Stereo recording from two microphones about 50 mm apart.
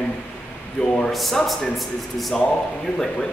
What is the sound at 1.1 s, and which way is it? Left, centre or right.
A man's voice, centre.